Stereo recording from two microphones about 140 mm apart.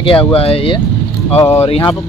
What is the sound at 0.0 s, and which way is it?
Speech, 40° left (ahead or behind).